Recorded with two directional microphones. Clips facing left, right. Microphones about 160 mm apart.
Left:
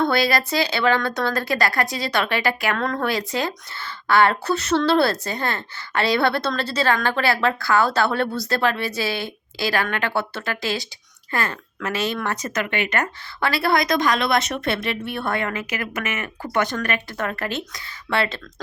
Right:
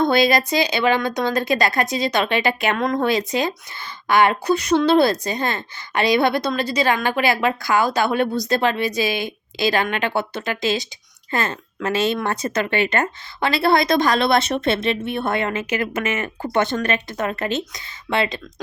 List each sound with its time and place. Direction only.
0.0 s a woman's voice: 20° right (ahead or behind)